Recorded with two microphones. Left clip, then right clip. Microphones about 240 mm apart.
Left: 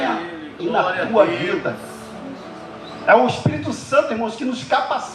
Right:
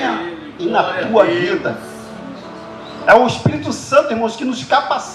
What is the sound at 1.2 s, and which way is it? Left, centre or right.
Speech, right.